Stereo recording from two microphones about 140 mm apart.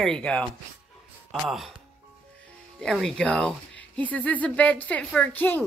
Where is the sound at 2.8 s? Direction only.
5° left (ahead or behind).